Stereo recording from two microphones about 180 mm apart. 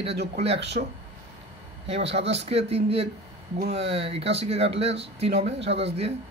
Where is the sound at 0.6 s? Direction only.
70° right (ahead or behind).